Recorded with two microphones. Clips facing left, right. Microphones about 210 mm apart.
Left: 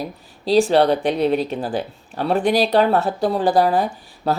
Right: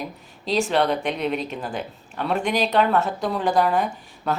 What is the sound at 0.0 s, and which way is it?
Speech, 35° left (ahead or behind).